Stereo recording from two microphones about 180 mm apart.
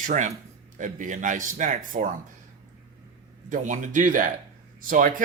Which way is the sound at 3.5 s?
45° right (ahead or behind).